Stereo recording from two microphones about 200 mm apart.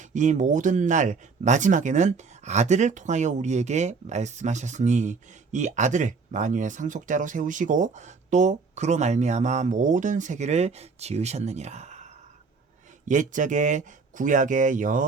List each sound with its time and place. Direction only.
0.0 s speech: 35° right (ahead or behind)
13.1 s speech: 40° right (ahead or behind)